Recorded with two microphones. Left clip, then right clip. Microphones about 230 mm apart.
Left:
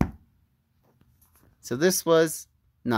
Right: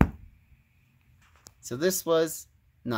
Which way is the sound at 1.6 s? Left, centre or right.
Left.